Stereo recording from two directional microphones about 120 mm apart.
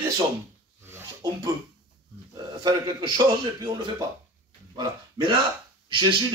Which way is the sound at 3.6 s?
30° right (ahead or behind).